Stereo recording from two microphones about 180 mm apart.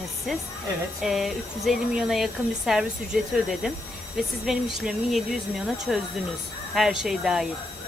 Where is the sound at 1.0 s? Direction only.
Centre (ahead or behind).